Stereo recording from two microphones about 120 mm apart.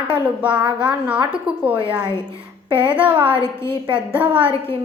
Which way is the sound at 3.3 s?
20° left (ahead or behind).